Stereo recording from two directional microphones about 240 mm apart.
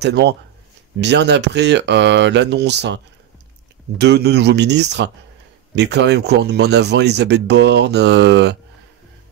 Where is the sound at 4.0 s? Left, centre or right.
Right.